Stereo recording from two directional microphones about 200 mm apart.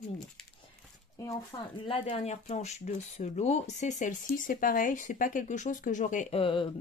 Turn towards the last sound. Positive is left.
turn(degrees=25)  # may be behind; listen again after turning